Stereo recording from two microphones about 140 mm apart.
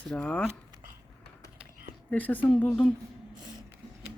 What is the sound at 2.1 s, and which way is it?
Speech, 10° left (ahead or behind).